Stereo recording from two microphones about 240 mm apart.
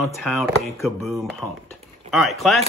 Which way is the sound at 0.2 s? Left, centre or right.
Centre.